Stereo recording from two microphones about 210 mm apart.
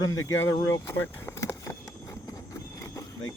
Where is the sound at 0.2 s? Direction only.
65° left (ahead or behind).